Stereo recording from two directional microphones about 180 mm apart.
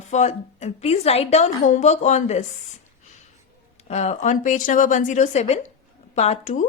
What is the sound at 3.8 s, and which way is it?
A woman's voice, 40° left (ahead or behind).